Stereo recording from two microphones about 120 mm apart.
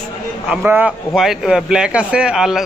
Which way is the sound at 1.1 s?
5° right (ahead or behind).